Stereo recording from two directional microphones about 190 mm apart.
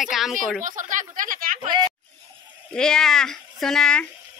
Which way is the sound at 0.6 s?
45° right (ahead or behind).